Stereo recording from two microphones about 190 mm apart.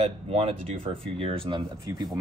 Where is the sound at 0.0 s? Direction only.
30° right (ahead or behind).